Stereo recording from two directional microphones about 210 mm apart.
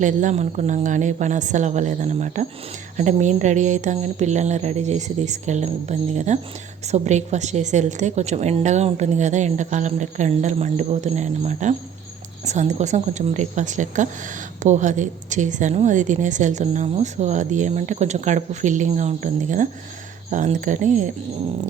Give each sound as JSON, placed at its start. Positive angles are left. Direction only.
{"t": 0.0, "sound": "speech", "side_deg": -35}